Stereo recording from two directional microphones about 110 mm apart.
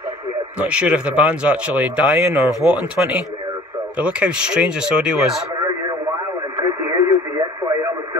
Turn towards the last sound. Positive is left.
turn(degrees=-30)  # may be behind; listen again after turning